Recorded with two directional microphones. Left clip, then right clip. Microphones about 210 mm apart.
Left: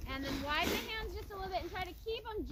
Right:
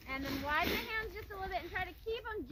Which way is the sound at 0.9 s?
15° right (ahead or behind).